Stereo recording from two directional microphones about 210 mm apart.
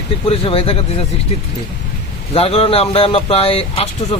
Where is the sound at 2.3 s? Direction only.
25° left (ahead or behind).